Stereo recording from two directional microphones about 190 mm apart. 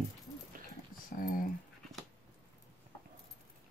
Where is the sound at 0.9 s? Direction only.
50° left (ahead or behind).